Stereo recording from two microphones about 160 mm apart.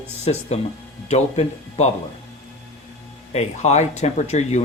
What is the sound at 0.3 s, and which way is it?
Speech, 40° left (ahead or behind).